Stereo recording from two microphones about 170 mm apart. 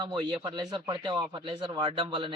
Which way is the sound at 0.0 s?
25° right (ahead or behind).